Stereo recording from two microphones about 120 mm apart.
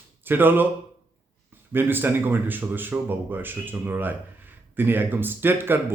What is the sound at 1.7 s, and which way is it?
A man's voice, 15° right (ahead or behind).